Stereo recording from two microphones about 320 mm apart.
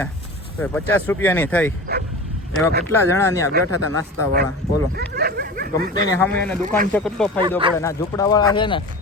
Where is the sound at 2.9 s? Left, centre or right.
Centre.